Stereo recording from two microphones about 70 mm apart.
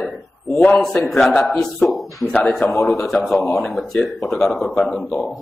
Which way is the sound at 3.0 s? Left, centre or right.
Centre.